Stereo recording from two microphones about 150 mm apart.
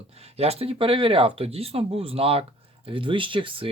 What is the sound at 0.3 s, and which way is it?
Speech, 40° right (ahead or behind).